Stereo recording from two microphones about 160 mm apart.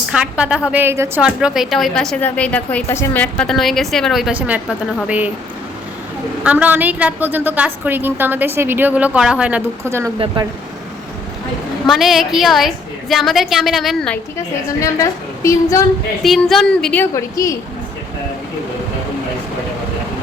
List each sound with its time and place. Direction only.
0.1 s a woman's voice: 5° right (ahead or behind)
1.2 s a woman's voice: 5° right (ahead or behind)
6.4 s a woman's voice: 10° right (ahead or behind)
10.4 s speech: 30° right (ahead or behind)
11.9 s a woman's voice: centre (ahead or behind)
15.4 s a woman's voice: 20° left (ahead or behind)
16.2 s a woman's voice: centre (ahead or behind); by 17.6 s 20° left (ahead or behind)